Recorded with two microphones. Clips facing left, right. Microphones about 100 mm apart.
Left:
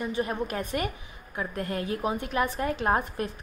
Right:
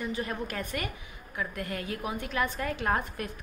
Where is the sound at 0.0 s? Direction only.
25° left (ahead or behind).